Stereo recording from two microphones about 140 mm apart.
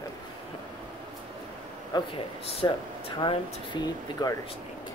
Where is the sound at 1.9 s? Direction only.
40° left (ahead or behind).